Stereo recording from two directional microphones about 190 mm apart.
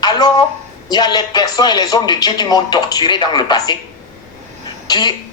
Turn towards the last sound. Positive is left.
turn(degrees=20)  # may be behind; listen again after turning